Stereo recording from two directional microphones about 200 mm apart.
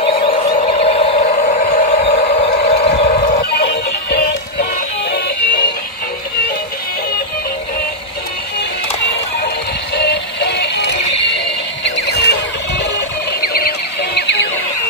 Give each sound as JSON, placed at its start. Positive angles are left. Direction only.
{"t": 0.0, "sound": "a sound", "side_deg": 30}
{"t": 3.6, "sound": "music", "side_deg": 55}
{"t": 9.9, "sound": "music", "side_deg": 55}